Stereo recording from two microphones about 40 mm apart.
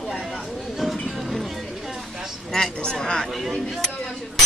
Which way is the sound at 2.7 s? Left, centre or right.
Left.